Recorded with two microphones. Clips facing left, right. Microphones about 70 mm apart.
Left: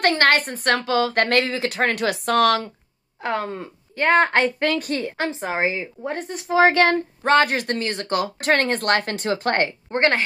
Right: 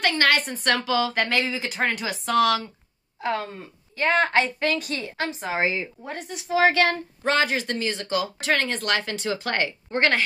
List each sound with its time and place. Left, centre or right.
0.0 s speech: left
3.4 s speech: left
5.1 s a woman's voice: left